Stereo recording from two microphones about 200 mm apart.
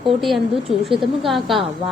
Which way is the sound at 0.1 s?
Centre (ahead or behind).